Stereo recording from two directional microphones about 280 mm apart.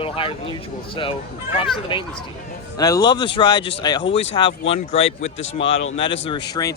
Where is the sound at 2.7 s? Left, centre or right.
Centre.